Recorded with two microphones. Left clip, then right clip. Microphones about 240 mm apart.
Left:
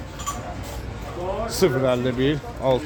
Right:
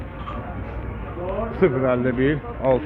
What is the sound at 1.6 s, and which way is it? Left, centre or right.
Speech, left.